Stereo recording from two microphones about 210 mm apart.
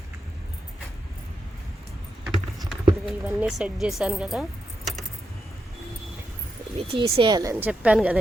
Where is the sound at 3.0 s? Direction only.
Centre (ahead or behind).